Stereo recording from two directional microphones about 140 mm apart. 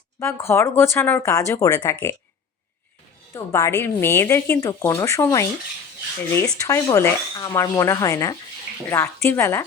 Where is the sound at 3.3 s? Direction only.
20° left (ahead or behind).